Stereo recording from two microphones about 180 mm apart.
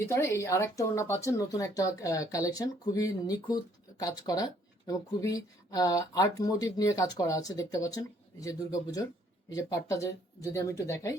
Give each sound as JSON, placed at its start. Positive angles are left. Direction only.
{"t": 0.0, "sound": "speech", "side_deg": 15}